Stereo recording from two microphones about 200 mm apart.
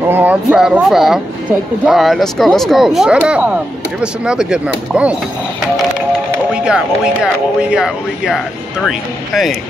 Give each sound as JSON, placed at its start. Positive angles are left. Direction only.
{"t": 0.1, "sound": "speech", "side_deg": -10}
{"t": 6.5, "sound": "speech", "side_deg": -5}